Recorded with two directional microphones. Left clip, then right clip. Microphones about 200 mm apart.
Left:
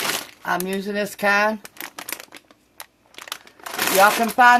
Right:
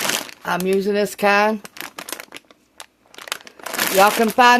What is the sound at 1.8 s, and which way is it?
Crumpling, 5° right (ahead or behind).